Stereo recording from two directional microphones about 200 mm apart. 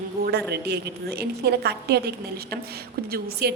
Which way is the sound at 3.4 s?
55° right (ahead or behind).